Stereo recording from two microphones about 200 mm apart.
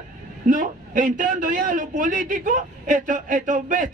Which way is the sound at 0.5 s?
40° right (ahead or behind).